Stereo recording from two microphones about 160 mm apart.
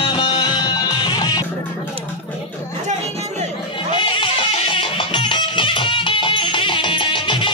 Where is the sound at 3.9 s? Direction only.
30° left (ahead or behind).